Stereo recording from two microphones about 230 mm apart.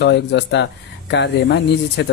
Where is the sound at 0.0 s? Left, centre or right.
Left.